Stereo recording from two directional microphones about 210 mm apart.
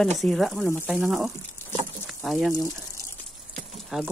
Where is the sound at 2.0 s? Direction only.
Centre (ahead or behind).